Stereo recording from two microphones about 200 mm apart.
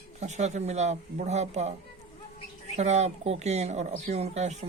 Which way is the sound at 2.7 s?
35° right (ahead or behind).